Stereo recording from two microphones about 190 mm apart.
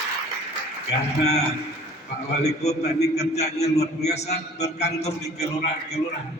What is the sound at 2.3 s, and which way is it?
A man's voice, 35° left (ahead or behind).